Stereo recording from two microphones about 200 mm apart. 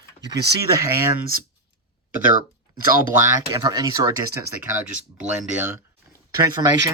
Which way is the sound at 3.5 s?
20° right (ahead or behind).